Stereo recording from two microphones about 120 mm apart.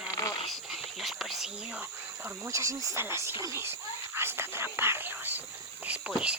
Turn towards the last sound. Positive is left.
turn(degrees=-10)  # may be behind; listen again after turning